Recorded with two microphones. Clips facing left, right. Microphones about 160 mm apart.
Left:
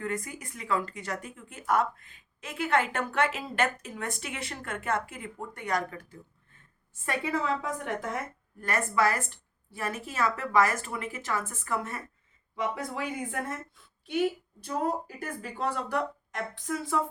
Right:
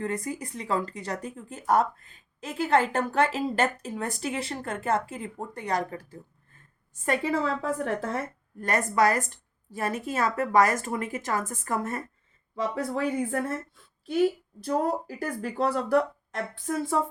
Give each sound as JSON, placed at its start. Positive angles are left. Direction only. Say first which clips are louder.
{"t": 0.0, "sound": "a woman's voice", "louder": "right 4 dB", "side_deg": -30}